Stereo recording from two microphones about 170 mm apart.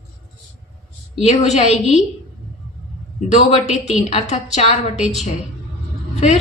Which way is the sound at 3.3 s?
40° left (ahead or behind).